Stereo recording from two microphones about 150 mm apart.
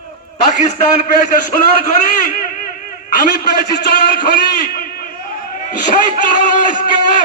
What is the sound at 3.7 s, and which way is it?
Speech, 90° left.